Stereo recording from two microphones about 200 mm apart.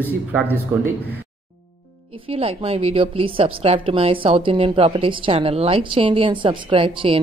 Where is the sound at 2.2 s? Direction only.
30° right (ahead or behind).